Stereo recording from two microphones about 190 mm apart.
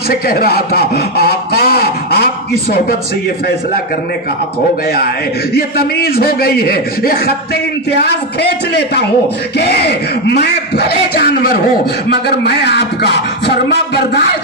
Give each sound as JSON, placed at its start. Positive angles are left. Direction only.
{"t": 0.1, "sound": "speech", "side_deg": 55}
{"t": 5.5, "sound": "a man's voice", "side_deg": 55}